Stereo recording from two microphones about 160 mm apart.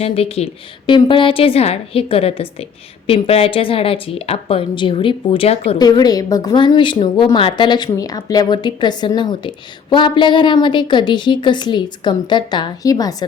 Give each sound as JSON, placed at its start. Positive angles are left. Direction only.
{"t": 0.0, "sound": "a woman's voice", "side_deg": 40}
{"t": 5.7, "sound": "a woman's voice", "side_deg": 25}